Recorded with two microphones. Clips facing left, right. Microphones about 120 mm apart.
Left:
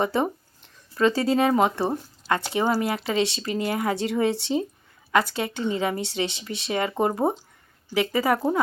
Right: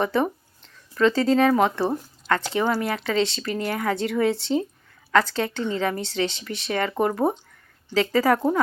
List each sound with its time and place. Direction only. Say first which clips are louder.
0.0 s speech: right 1 dB; 20° left (ahead or behind)